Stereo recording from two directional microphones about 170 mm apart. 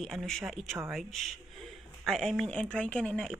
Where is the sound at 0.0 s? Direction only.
Centre (ahead or behind).